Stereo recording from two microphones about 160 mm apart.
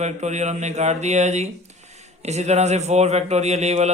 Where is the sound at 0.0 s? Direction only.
45° right (ahead or behind).